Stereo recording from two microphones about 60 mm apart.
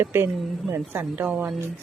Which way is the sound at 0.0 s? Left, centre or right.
Right.